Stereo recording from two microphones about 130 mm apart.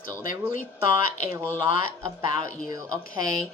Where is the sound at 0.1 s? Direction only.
90° left.